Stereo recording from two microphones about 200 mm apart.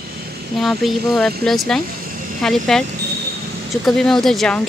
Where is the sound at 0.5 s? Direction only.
Centre (ahead or behind).